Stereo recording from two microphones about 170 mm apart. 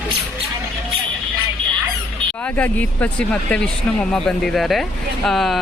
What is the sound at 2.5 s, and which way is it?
Speech, 10° left (ahead or behind).